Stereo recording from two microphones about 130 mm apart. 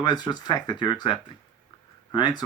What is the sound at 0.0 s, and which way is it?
Speech, 35° left (ahead or behind).